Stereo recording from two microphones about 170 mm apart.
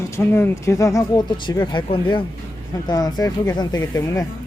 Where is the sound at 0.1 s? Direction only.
15° left (ahead or behind).